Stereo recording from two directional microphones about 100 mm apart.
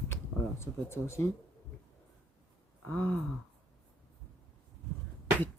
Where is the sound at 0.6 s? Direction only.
25° left (ahead or behind).